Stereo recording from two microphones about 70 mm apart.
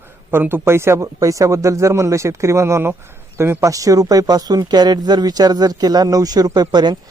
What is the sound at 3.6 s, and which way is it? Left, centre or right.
Speech, right.